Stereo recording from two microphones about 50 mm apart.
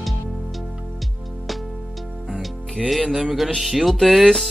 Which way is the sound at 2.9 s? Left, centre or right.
Centre.